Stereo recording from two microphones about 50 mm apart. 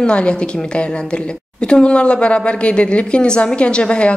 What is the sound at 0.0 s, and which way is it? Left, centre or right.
A woman's voice, centre.